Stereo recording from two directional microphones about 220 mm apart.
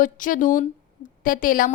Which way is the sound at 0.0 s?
35° left (ahead or behind).